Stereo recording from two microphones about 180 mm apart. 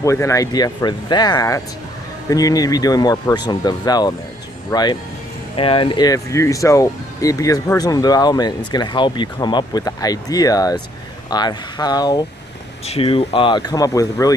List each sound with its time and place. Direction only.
0.0 s speech: 15° left (ahead or behind)
12.8 s speech: 30° left (ahead or behind)